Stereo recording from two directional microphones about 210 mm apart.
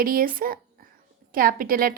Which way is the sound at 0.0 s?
45° right (ahead or behind).